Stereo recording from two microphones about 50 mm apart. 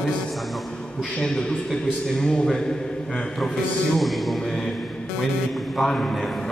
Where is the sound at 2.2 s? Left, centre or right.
Centre.